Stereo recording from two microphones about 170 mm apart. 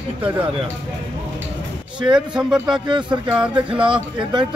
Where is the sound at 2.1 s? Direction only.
5° right (ahead or behind).